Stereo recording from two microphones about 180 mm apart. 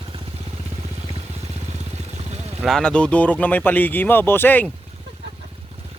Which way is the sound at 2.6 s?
5° left (ahead or behind).